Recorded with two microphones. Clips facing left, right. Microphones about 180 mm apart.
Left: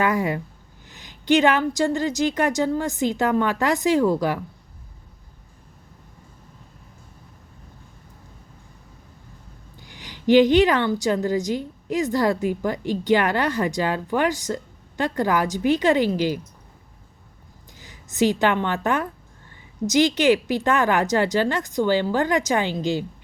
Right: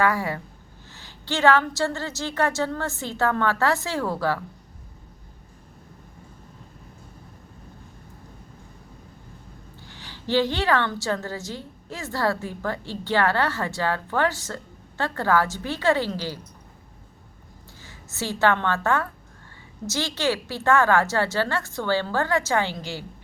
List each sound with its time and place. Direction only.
0.0 s a woman's voice: 20° left (ahead or behind)
9.8 s a woman's voice: 15° left (ahead or behind)
17.8 s a woman's voice: 15° left (ahead or behind)